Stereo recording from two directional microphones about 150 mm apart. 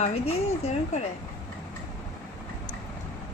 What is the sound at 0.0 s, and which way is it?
A woman's voice, 45° left (ahead or behind).